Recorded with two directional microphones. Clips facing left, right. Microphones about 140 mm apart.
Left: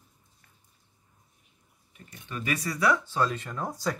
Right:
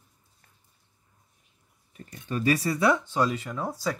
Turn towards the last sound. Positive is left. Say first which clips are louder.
# right 1 dB
turn(degrees=-5)  # may be behind; listen again after turning